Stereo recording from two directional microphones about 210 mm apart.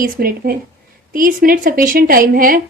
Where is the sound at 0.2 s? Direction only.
45° right (ahead or behind).